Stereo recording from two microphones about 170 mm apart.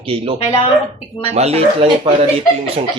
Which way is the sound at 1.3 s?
40° right (ahead or behind).